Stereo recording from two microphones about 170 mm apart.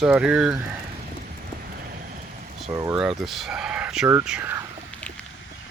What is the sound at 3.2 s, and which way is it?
Speech, centre (ahead or behind).